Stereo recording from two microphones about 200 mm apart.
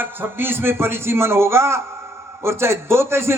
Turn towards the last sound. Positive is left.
turn(degrees=-10)  # may be behind; listen again after turning